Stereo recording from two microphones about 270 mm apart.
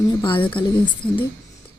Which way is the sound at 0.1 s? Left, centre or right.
Centre.